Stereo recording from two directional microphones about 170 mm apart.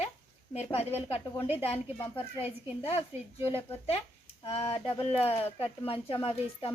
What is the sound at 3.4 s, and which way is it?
Speech, 35° left (ahead or behind).